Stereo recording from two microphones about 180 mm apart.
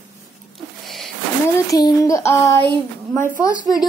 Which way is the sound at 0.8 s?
Centre (ahead or behind).